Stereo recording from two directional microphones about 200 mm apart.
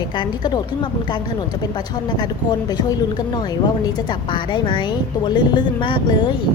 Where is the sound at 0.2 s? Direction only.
20° left (ahead or behind).